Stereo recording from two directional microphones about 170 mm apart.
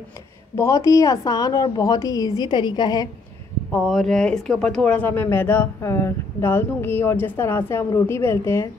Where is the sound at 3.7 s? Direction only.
5° left (ahead or behind).